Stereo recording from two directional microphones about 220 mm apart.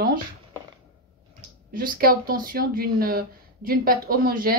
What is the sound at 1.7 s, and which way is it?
Speech, 40° right (ahead or behind).